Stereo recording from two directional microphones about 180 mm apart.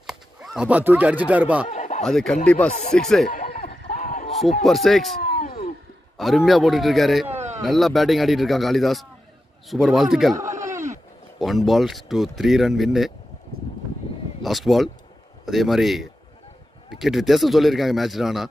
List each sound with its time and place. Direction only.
0.0 s speech: 5° right (ahead or behind)
1.7 s snicker: 40° left (ahead or behind)
2.0 s speech: centre (ahead or behind)
3.3 s a sound: 55° left (ahead or behind)
4.6 s speech: centre (ahead or behind)
5.2 s a sound: 55° left (ahead or behind)
6.1 s speech: centre (ahead or behind)
7.3 s a sound: 40° right (ahead or behind)
7.6 s speech: centre (ahead or behind)
11.3 s speech: centre (ahead or behind)
14.4 s speech: centre (ahead or behind)